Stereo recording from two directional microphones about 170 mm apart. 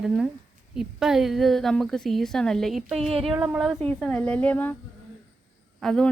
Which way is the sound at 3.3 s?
5° right (ahead or behind).